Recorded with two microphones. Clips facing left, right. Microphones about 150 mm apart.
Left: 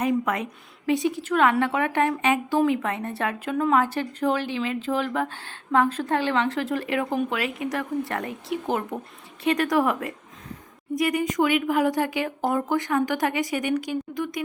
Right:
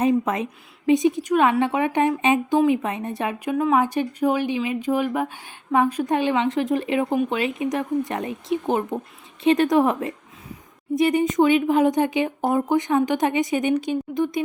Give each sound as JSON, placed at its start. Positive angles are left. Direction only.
{"t": 0.0, "sound": "speech", "side_deg": -25}